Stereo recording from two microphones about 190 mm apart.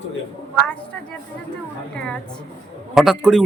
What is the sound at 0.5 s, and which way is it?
Speech, 5° left (ahead or behind).